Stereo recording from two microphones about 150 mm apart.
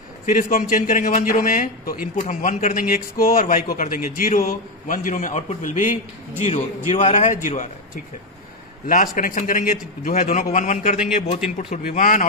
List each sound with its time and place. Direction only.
0.3 s a man's voice: 65° left (ahead or behind)
2.2 s a man's voice: 55° left (ahead or behind)
8.8 s a man's voice: 65° left (ahead or behind)